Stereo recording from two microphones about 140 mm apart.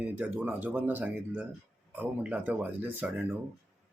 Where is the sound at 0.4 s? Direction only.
10° right (ahead or behind).